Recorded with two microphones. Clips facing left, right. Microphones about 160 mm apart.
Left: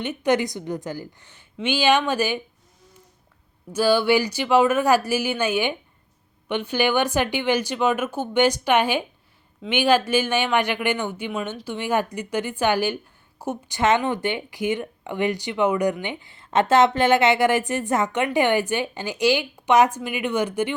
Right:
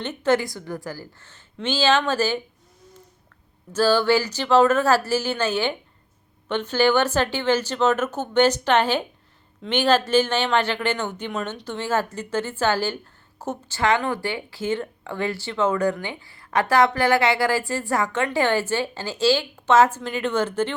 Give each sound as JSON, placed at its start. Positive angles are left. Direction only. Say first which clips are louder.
{"t": 0.0, "sound": "speech", "louder": "even", "side_deg": 10}
{"t": 3.7, "sound": "speech", "louder": "even", "side_deg": 10}